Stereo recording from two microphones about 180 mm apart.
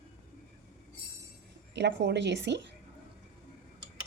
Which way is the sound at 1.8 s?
75° right (ahead or behind).